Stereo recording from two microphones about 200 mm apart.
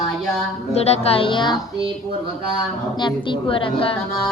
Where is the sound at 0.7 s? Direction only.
30° left (ahead or behind).